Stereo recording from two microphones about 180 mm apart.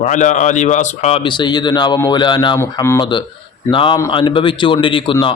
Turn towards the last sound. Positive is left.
turn(degrees=30)  # may be behind; listen again after turning